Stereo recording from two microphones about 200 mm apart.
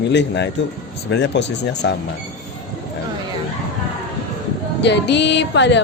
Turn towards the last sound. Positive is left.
turn(degrees=60)  # may be behind; listen again after turning